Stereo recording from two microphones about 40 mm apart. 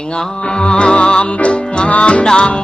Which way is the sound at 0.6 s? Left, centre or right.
Left.